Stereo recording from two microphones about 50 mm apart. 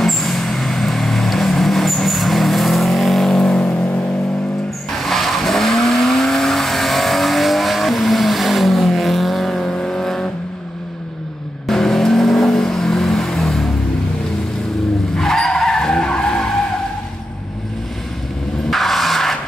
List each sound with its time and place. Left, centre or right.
0.0 s vehicle: centre
3.5 s vehicle: left
4.9 s vehicle: centre
11.6 s vehicle: centre
15.1 s skidding: centre
18.7 s music: centre